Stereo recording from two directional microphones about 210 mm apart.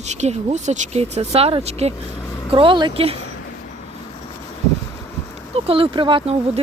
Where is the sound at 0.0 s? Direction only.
35° right (ahead or behind).